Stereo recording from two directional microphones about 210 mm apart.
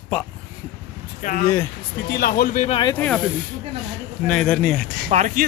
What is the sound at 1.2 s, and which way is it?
Speech, 40° left (ahead or behind).